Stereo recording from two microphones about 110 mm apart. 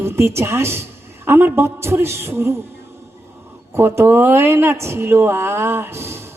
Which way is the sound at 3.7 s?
25° right (ahead or behind).